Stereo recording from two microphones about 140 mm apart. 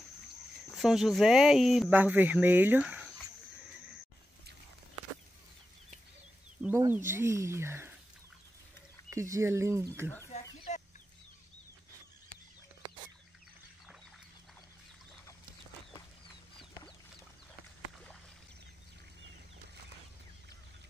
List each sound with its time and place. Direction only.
0.7 s speech: 5° right (ahead or behind)
1.9 s speech: 15° right (ahead or behind)
6.7 s speech: 20° right (ahead or behind)
9.1 s speech: 20° right (ahead or behind)
10.3 s chicken: 50° left (ahead or behind)